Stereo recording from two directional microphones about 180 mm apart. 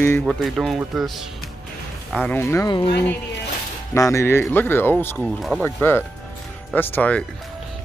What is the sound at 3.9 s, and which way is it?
Speech, 15° left (ahead or behind).